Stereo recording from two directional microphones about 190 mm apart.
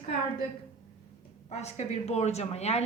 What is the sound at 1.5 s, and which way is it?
A woman's voice, 35° left (ahead or behind).